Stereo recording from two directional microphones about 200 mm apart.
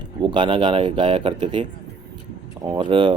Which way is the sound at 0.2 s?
25° right (ahead or behind).